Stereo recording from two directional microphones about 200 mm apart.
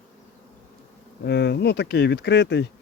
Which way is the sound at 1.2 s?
55° left (ahead or behind).